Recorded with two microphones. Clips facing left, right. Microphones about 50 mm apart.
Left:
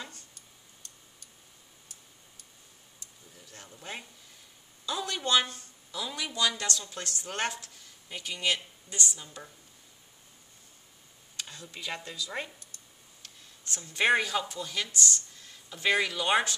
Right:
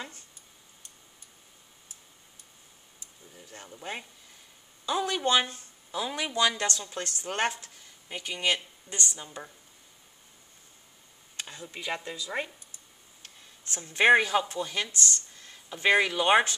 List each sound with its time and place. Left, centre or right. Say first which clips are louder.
3.5 s speech: right 4 dB; centre
11.3 s speech: right 3 dB; centre